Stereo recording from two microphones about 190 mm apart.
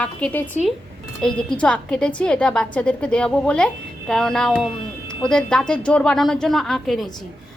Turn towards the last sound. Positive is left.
turn(degrees=0)  # may be behind; listen again after turning